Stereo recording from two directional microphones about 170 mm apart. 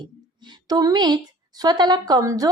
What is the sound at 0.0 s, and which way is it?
A woman's voice, 25° right (ahead or behind).